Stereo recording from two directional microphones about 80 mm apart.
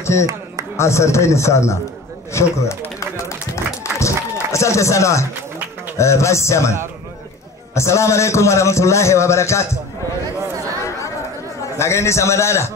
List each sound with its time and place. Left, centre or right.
0.0 s a man's voice: left
3.8 s a sound: left
5.9 s a man's voice: left
11.7 s a man's voice: left